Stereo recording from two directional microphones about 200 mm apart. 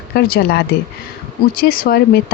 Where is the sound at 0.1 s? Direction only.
50° left (ahead or behind).